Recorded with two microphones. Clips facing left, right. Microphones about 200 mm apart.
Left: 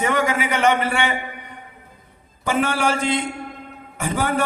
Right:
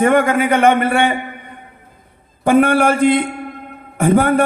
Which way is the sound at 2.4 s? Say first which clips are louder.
Right 9 dB; 55° right (ahead or behind).